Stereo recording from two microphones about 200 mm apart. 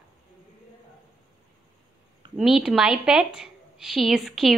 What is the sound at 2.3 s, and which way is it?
A woman's voice, centre (ahead or behind).